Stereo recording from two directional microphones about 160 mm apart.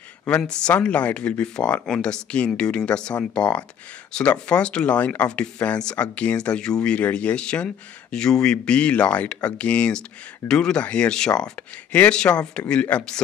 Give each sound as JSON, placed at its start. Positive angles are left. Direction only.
{"t": 0.4, "sound": "speech", "side_deg": 5}